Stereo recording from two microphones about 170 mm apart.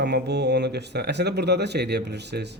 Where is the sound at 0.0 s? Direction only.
85° right.